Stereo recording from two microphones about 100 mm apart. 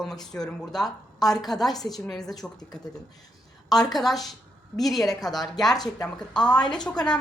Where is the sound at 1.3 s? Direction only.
5° left (ahead or behind).